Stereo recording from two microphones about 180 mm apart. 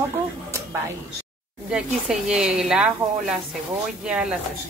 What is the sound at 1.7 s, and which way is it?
A woman's voice, 5° right (ahead or behind).